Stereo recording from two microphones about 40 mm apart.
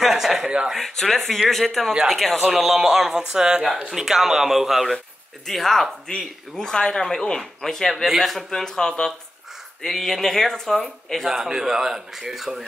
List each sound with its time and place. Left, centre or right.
0.0 s a sound: centre
0.7 s speech: centre
3.3 s speech: right
3.9 s speech: centre
5.5 s speech: centre
7.9 s speech: centre
8.5 s speech: centre
11.2 s speech: centre